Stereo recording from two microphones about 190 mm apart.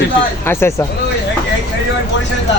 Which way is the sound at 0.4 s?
15° left (ahead or behind).